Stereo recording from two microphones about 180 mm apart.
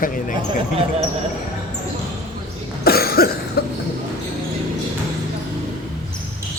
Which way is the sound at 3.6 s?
60° left (ahead or behind).